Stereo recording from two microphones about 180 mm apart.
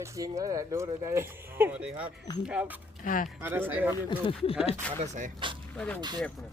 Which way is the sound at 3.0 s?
50° left (ahead or behind).